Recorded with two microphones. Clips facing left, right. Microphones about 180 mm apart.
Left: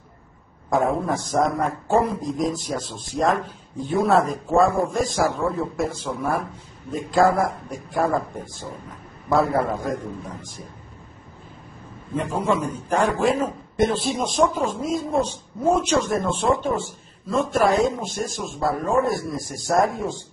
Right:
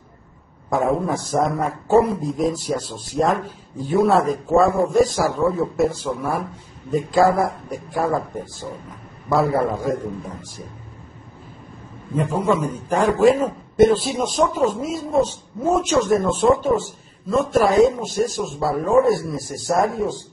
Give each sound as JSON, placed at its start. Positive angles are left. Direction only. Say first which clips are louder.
{"t": 0.7, "sound": "a man's voice", "louder": "right 1 dB", "side_deg": 0}
{"t": 9.3, "sound": "speech", "louder": "right 2 dB", "side_deg": -10}
{"t": 12.2, "sound": "a man's voice", "louder": "right 3 dB", "side_deg": -5}